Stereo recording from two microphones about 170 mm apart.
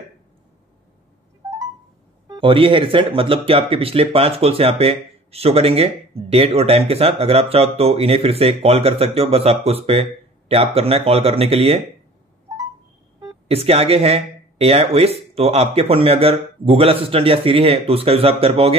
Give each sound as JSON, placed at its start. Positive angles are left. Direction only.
{"t": 2.2, "sound": "speech", "side_deg": -30}
{"t": 13.5, "sound": "speech", "side_deg": -35}